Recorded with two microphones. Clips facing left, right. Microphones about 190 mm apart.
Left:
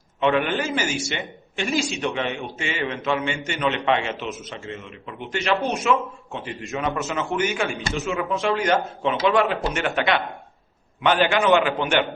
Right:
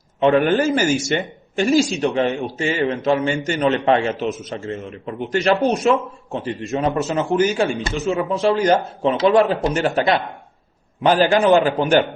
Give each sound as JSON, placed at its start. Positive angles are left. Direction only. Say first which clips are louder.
{"t": 0.2, "sound": "speech", "louder": "right 6 dB", "side_deg": -40}